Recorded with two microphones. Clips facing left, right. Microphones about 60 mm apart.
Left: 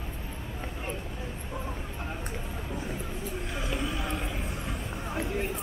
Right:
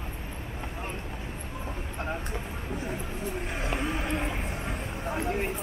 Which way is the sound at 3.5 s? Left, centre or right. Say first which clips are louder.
Right 1 dB; right.